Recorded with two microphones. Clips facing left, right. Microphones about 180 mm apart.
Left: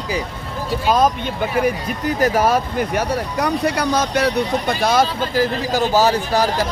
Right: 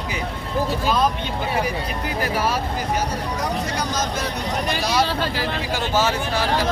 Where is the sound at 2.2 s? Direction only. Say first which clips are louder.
Left 7 dB; 45° left (ahead or behind); by 4.3 s 65° left (ahead or behind).